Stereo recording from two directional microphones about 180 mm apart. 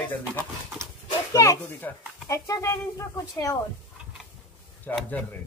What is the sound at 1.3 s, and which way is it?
A child's voice, 15° left (ahead or behind).